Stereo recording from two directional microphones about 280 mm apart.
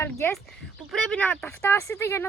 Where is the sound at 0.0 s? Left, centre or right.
Centre.